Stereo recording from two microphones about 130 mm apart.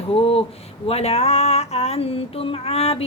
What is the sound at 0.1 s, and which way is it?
A woman's voice, 45° left (ahead or behind).